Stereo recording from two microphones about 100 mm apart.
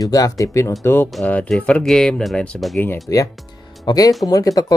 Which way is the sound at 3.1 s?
30° left (ahead or behind).